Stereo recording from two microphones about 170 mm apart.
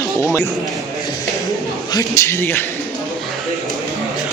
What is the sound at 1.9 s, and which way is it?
Speech, 20° left (ahead or behind).